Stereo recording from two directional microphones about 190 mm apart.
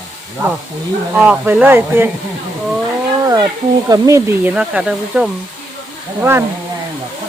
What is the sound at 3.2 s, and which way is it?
Speech, 20° right (ahead or behind).